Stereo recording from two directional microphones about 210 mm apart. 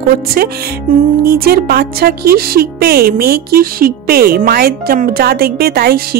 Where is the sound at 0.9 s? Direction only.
40° right (ahead or behind).